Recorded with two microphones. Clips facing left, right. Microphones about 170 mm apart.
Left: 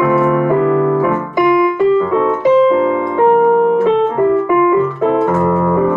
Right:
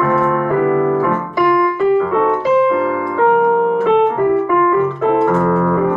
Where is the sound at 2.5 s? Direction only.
25° left (ahead or behind).